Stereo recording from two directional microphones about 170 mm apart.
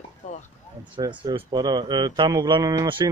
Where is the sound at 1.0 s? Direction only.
25° right (ahead or behind).